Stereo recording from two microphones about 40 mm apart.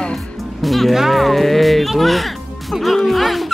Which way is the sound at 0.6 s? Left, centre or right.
Centre.